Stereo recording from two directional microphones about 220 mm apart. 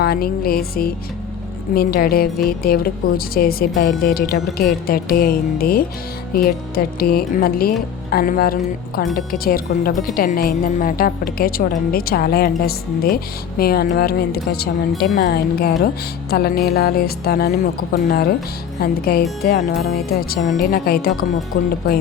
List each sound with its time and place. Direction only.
0.0 s a woman's voice: 45° left (ahead or behind)